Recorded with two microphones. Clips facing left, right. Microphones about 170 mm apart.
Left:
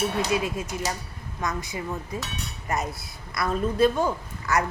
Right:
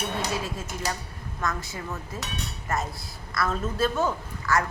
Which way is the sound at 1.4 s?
20° left (ahead or behind).